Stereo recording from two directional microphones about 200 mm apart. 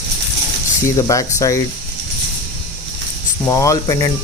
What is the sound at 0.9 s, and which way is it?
Speech, 15° left (ahead or behind).